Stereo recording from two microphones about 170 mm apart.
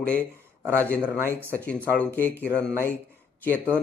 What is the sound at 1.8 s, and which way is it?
A man's voice, 10° left (ahead or behind).